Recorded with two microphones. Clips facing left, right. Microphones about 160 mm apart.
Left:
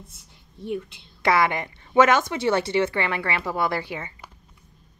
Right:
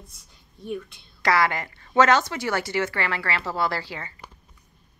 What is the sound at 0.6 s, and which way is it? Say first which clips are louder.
A woman's voice: left 2 dB; 25° left (ahead or behind).